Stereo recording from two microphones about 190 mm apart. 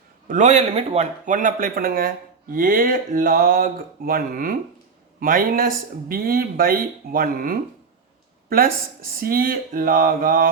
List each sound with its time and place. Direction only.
0.3 s speech: 40° right (ahead or behind)